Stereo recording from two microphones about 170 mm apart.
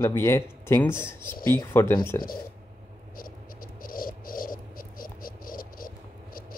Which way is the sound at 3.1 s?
55° left (ahead or behind).